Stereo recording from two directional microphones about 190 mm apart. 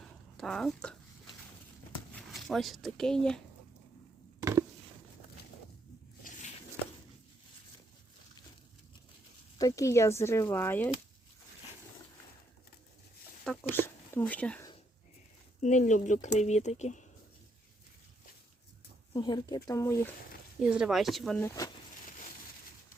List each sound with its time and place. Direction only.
0.0 s a sound: centre (ahead or behind)
2.1 s speech: centre (ahead or behind)
4.4 s a sound: 15° right (ahead or behind)
9.6 s speech: 20° left (ahead or behind)
13.4 s a sound: 5° left (ahead or behind)
15.6 s speech: 40° left (ahead or behind)
19.1 s speech: 25° left (ahead or behind)
20.6 s speech: 5° right (ahead or behind)
21.3 s speech: 15° left (ahead or behind)